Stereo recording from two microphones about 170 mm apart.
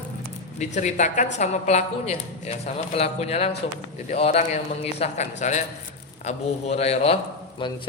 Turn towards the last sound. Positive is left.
turn(degrees=30)  # may be behind; listen again after turning